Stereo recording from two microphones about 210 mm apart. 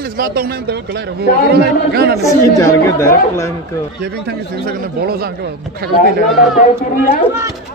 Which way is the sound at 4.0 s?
50° right (ahead or behind).